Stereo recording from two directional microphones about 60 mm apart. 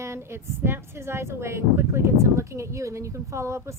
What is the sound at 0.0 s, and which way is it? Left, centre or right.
A woman's voice, right.